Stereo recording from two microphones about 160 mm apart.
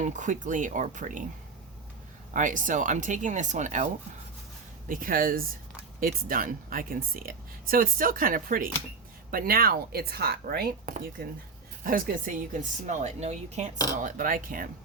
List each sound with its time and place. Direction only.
0.0 s speech: 50° right (ahead or behind)
2.3 s speech: 55° right (ahead or behind)
4.9 s speech: 60° right (ahead or behind)
12.9 s speech: 45° right (ahead or behind)
14.0 s speech: 55° right (ahead or behind)